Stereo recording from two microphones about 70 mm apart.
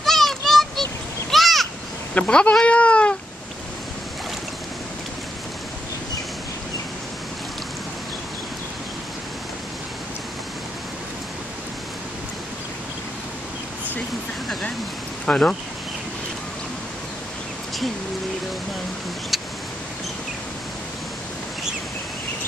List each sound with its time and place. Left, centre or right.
0.0 s a sound: centre
2.1 s speech: centre
15.2 s speech: centre